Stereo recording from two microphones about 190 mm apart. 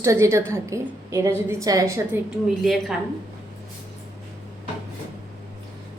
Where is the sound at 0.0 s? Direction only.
15° right (ahead or behind).